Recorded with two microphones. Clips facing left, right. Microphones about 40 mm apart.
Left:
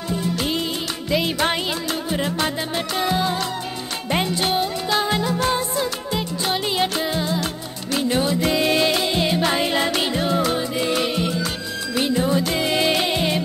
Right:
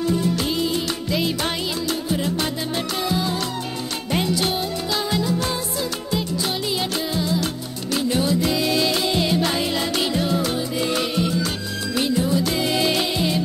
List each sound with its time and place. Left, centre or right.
0.2 s music: left